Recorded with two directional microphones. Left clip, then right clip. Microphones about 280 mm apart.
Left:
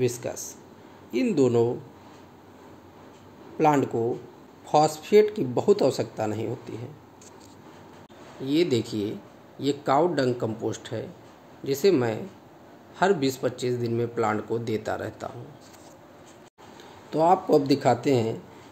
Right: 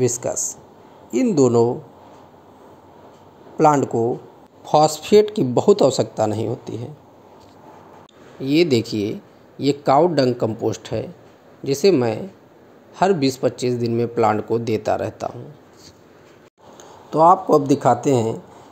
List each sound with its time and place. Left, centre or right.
0.0 s a man's voice: right
3.5 s a man's voice: right
8.5 s a man's voice: right
17.1 s a man's voice: centre